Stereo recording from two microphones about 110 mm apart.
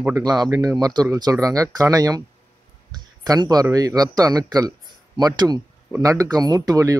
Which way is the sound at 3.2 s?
35° right (ahead or behind).